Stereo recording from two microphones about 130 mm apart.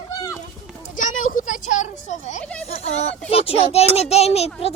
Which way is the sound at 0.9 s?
85° left.